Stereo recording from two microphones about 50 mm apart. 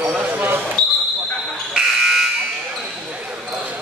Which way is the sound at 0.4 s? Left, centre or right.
Right.